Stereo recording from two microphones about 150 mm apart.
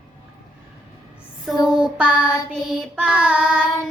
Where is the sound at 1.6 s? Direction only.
5° right (ahead or behind).